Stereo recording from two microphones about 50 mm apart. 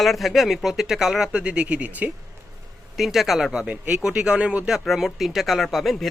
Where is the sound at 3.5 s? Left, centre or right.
Centre.